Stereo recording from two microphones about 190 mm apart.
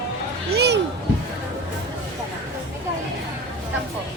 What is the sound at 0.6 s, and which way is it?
Music, 60° right (ahead or behind).